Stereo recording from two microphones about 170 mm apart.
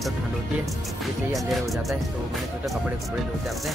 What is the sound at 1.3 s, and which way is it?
Speech, centre (ahead or behind).